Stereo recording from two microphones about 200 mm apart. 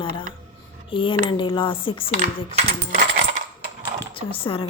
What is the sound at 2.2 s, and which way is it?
Speech, 35° right (ahead or behind).